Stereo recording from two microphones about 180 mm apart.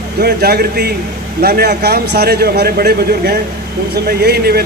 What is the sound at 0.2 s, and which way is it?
Speech, 60° right (ahead or behind).